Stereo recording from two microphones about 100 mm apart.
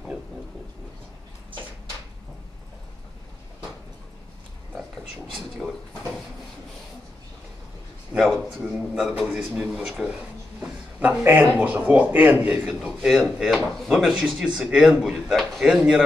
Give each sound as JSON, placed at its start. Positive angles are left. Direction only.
{"t": 4.7, "sound": "a sound", "side_deg": 5}
{"t": 8.4, "sound": "speech", "side_deg": 5}
{"t": 11.0, "sound": "speech", "side_deg": -15}
{"t": 13.1, "sound": "speech", "side_deg": -5}